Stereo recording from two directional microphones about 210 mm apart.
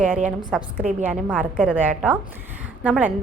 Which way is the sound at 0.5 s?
5° left (ahead or behind).